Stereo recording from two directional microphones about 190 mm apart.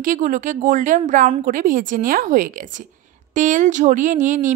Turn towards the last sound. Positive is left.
turn(degrees=-40)  # may be behind; listen again after turning